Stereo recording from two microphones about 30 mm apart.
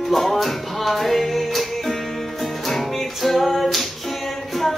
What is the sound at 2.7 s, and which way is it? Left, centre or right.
Music, centre.